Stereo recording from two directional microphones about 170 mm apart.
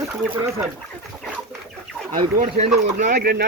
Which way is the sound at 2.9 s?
45° right (ahead or behind).